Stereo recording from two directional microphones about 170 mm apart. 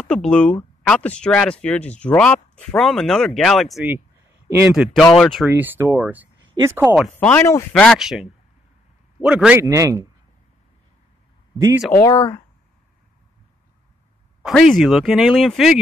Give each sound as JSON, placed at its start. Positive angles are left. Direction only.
{"t": 0.0, "sound": "speech", "side_deg": 5}
{"t": 5.5, "sound": "speech", "side_deg": -15}
{"t": 7.2, "sound": "speech", "side_deg": 10}
{"t": 12.0, "sound": "speech", "side_deg": 15}
{"t": 14.4, "sound": "speech", "side_deg": 0}